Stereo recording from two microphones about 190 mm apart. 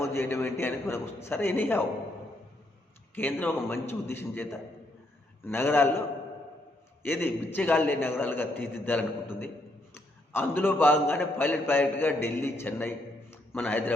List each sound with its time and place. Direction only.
0.0 s a man's voice: 15° left (ahead or behind)
3.2 s a man's voice: 10° left (ahead or behind)
7.0 s a man's voice: 10° left (ahead or behind)